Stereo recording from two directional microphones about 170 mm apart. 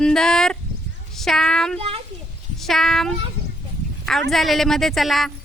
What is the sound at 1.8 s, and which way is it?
Speech, 35° right (ahead or behind).